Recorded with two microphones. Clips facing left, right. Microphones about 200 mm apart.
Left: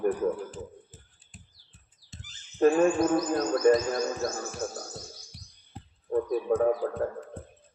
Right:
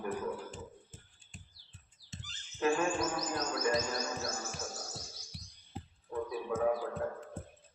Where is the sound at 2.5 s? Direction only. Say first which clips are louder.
Left 10 dB; 55° left (ahead or behind).